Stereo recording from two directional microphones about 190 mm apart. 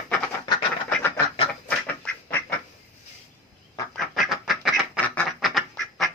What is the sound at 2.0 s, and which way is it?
Duck, 10° left (ahead or behind).